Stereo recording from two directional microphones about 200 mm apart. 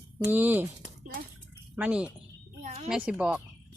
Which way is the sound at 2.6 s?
35° right (ahead or behind).